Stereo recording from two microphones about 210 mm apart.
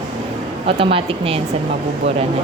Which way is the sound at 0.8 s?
25° right (ahead or behind).